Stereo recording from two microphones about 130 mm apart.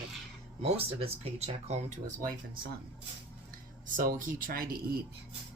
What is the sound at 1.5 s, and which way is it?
Speech, 60° right (ahead or behind).